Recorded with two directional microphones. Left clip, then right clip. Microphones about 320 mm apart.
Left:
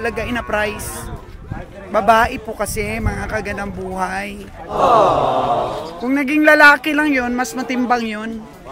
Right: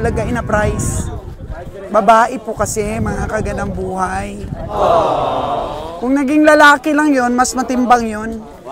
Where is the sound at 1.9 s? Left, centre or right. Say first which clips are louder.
Right 3 dB; centre.